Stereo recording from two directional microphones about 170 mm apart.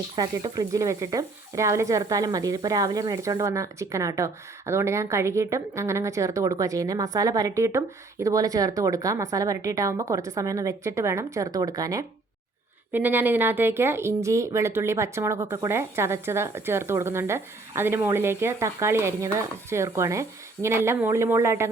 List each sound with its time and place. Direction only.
0.2 s speech: 20° right (ahead or behind)